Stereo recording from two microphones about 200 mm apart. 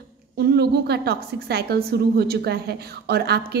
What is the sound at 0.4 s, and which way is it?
A woman's voice, 55° right (ahead or behind).